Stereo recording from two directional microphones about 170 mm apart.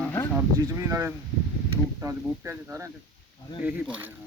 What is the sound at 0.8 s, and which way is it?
Speech, 15° right (ahead or behind).